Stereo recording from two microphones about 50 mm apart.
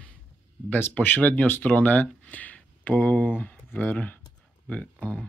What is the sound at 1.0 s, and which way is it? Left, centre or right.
Speech, left.